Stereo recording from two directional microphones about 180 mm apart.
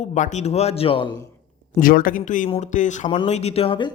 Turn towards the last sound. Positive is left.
turn(degrees=30)  # may be behind; listen again after turning